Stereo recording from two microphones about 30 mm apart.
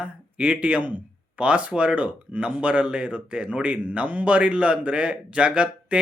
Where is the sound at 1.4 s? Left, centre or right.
Right.